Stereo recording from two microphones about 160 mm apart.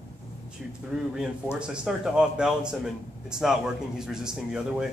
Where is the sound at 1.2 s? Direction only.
5° right (ahead or behind).